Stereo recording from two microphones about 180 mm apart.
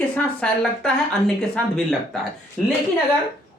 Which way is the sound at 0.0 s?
5° left (ahead or behind).